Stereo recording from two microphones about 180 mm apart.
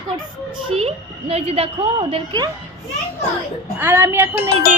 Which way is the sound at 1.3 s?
35° right (ahead or behind).